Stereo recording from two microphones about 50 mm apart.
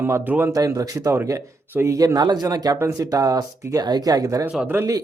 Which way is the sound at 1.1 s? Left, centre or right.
Right.